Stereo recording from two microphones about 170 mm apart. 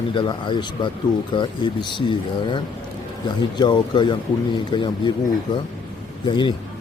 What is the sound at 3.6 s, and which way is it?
Speech, 25° left (ahead or behind).